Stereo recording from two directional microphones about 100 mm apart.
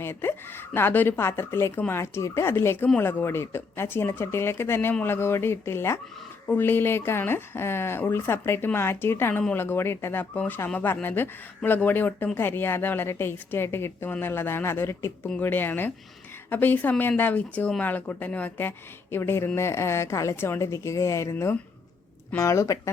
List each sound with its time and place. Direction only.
0.0 s speech: 20° left (ahead or behind)